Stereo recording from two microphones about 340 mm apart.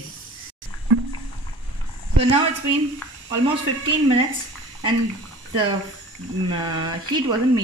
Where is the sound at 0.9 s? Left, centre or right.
Right.